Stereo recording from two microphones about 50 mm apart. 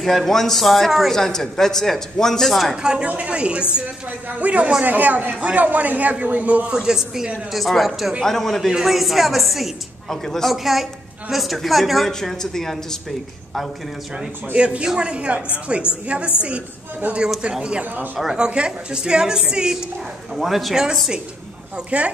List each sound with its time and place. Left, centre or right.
0.0 s a man's voice: centre
2.8 s a woman's voice: centre
6.7 s a woman's voice: centre
7.5 s a man's voice: centre
8.6 s a man's voice: centre
14.5 s a woman's voice: right; by 21.0 s centre
21.7 s a woman's voice: right